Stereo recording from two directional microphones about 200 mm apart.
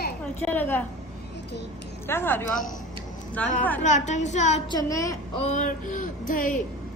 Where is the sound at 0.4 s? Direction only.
10° left (ahead or behind).